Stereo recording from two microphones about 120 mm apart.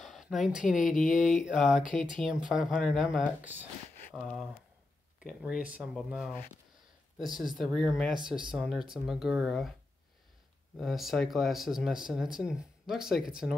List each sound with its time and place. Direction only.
0.0 s a sound: centre (ahead or behind)
0.6 s speech: 5° right (ahead or behind)
2.4 s speech: 90° left
2.8 s speech: centre (ahead or behind)
6.0 s speech: 5° right (ahead or behind)
10.8 s speech: centre (ahead or behind)